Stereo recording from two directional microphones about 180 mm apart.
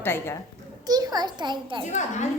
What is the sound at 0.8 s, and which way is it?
A child's voice, 20° right (ahead or behind).